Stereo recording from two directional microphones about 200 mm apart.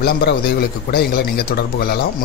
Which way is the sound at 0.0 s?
50° left (ahead or behind).